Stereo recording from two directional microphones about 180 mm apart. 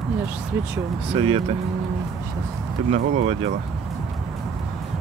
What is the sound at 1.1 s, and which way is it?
Speech, 30° right (ahead or behind).